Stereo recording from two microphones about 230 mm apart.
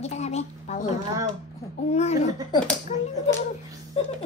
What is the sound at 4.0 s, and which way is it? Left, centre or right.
Speech, left.